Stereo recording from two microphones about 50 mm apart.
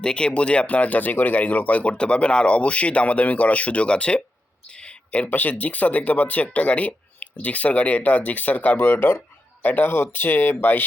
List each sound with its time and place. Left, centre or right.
0.0 s speech: centre; by 8.8 s left
8.8 s speech: left
9.6 s speech: left
9.9 s speech: left